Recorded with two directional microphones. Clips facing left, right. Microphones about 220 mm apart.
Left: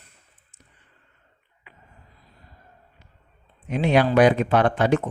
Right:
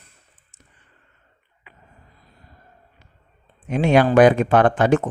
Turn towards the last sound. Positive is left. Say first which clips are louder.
# right 3 dB
turn(degrees=-50)  # may be behind; listen again after turning